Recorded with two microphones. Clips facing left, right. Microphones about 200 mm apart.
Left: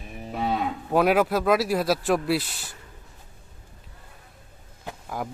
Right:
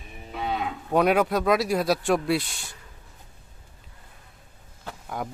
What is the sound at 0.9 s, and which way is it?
Speech, centre (ahead or behind).